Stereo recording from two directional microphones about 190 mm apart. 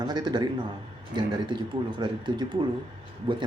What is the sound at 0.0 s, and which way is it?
A man's voice, 20° right (ahead or behind).